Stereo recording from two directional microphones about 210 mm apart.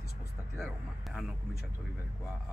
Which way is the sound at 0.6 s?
Centre (ahead or behind).